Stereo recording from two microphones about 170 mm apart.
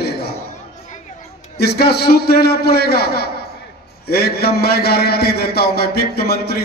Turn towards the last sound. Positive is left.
turn(degrees=65)  # may be behind; listen again after turning